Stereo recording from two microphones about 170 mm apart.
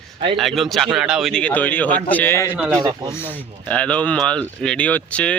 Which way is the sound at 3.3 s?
10° left (ahead or behind).